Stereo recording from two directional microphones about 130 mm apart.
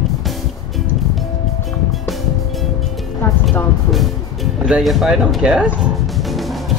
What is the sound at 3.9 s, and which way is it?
Speech, centre (ahead or behind).